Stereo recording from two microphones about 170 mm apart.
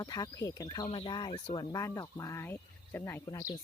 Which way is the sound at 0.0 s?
20° left (ahead or behind).